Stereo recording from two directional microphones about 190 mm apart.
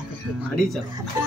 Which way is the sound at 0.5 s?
Centre (ahead or behind).